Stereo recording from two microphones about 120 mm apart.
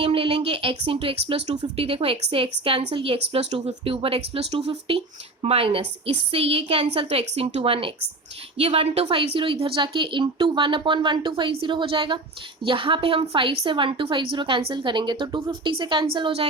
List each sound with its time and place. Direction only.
0.0 s a woman's voice: 50° right (ahead or behind)
3.5 s speech: 70° right (ahead or behind)
3.9 s a woman's voice: 50° right (ahead or behind)